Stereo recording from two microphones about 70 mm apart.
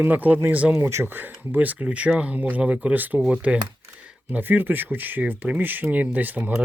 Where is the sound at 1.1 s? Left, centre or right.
Right.